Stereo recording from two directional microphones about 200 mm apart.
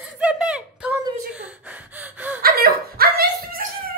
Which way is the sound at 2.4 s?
50° right (ahead or behind).